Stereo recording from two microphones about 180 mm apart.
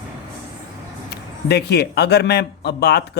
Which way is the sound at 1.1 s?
65° left (ahead or behind).